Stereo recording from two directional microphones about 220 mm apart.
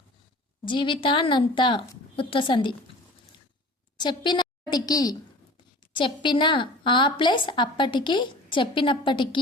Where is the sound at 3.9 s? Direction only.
20° left (ahead or behind).